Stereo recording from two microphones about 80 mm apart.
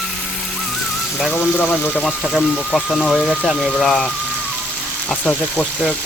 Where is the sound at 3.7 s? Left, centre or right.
Centre.